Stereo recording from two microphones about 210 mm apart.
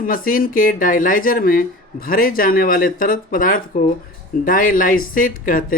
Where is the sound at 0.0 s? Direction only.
40° left (ahead or behind).